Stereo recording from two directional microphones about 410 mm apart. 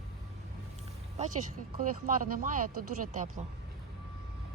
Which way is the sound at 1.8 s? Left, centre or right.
Centre.